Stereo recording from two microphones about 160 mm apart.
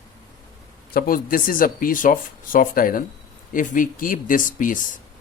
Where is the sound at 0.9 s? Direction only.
65° left (ahead or behind).